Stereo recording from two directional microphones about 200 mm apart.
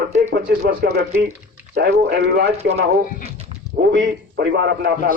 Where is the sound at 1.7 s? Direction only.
55° right (ahead or behind).